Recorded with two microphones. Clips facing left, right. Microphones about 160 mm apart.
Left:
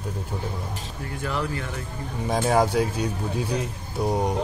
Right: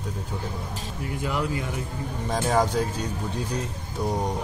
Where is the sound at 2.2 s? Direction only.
10° left (ahead or behind).